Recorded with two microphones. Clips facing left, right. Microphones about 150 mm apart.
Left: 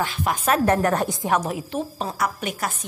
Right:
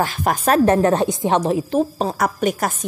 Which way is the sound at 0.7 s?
25° right (ahead or behind).